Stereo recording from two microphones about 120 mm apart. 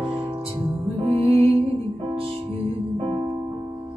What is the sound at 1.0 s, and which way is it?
Music, 50° right (ahead or behind).